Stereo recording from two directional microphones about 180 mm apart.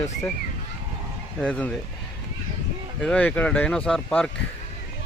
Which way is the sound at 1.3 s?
5° left (ahead or behind).